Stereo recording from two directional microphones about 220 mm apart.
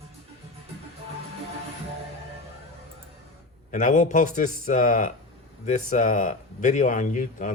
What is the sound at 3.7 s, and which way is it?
Speech, 35° left (ahead or behind).